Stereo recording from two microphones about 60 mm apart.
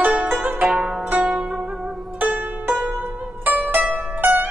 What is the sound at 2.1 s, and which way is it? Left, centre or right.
Zither, right.